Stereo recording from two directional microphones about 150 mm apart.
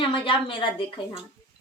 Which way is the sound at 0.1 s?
35° left (ahead or behind).